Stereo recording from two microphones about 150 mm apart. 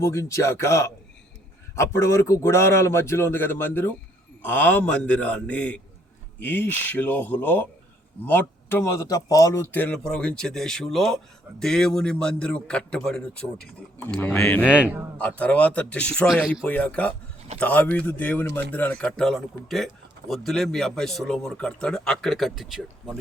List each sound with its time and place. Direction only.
0.0 s a man's voice: 20° left (ahead or behind)
9.7 s a man's voice: 10° left (ahead or behind)
14.6 s a man's voice: 10° right (ahead or behind)
15.2 s a man's voice: 10° left (ahead or behind)